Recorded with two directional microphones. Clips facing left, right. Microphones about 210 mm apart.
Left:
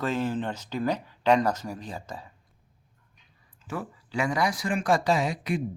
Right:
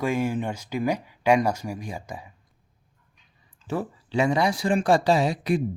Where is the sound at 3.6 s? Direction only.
30° right (ahead or behind).